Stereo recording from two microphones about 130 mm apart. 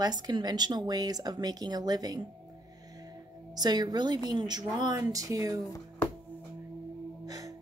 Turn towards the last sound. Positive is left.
turn(degrees=-30)  # may be behind; listen again after turning